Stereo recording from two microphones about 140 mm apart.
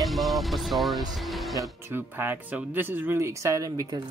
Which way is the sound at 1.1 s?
Centre (ahead or behind).